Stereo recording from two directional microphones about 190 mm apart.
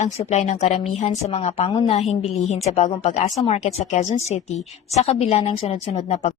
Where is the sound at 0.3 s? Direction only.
40° left (ahead or behind).